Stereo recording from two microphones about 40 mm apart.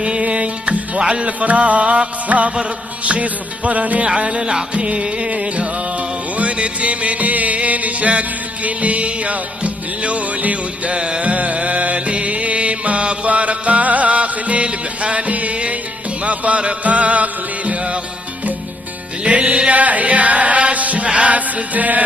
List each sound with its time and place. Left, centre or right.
0.0 s music: right
1.4 s chant: right
4.1 s music: right
11.0 s music: right
11.2 s music: right
16.3 s chant: right
19.2 s chant: right